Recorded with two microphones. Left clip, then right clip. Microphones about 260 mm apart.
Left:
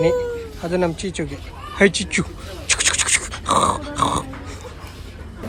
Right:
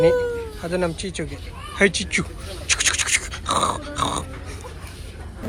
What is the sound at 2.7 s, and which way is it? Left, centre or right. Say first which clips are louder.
Grunt: left 2 dB; centre.